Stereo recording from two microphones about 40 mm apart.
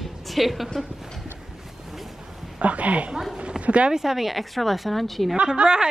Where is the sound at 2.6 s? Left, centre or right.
Right.